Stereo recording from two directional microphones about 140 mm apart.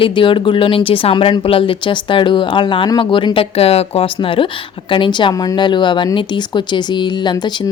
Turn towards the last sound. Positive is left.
turn(degrees=30)  # may be behind; listen again after turning